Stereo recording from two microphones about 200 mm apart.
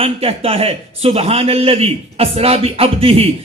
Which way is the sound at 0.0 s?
30° right (ahead or behind).